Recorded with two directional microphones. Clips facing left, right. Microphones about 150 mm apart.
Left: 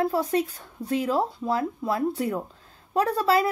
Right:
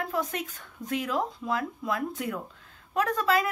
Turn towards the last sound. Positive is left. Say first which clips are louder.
# left 4 dB
turn(degrees=30)  # may be behind; listen again after turning